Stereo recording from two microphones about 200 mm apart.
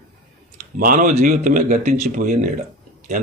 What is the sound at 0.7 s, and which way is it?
Speech, 45° right (ahead or behind).